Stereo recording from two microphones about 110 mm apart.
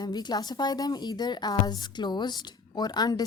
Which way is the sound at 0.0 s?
40° left (ahead or behind).